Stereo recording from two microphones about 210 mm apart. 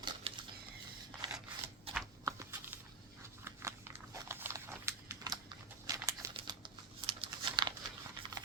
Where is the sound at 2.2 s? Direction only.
10° right (ahead or behind).